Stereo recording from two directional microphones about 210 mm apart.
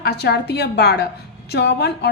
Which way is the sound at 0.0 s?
50° left (ahead or behind).